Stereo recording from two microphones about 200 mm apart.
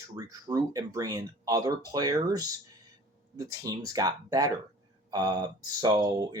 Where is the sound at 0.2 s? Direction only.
20° right (ahead or behind).